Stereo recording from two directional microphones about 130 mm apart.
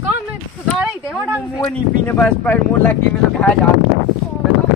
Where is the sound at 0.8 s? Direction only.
5° right (ahead or behind).